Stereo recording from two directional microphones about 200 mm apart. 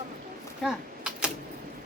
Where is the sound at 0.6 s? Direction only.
5° right (ahead or behind).